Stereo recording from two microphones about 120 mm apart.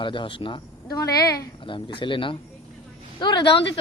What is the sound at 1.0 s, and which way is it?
Speech, 30° left (ahead or behind).